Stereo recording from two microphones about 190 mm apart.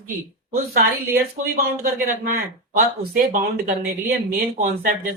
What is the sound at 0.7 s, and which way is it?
Speech, 50° right (ahead or behind).